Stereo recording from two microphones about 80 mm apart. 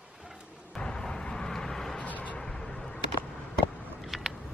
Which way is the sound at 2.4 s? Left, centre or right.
Centre.